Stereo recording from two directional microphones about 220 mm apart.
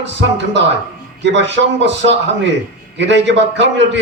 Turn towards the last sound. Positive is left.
turn(degrees=-55)  # may be behind; listen again after turning